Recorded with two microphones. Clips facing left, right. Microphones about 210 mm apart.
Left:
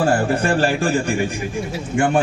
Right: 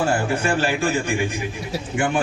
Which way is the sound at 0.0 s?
40° left (ahead or behind).